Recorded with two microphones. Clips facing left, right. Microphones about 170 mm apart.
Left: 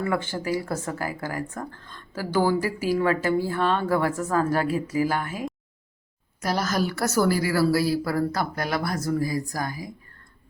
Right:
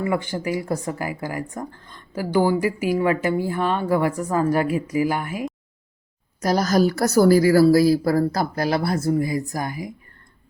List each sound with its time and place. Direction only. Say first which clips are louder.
0.0 s a woman's voice: right 3 dB; 15° right (ahead or behind)
6.4 s a woman's voice: right 7 dB; 40° right (ahead or behind); by 9.9 s 20° right (ahead or behind)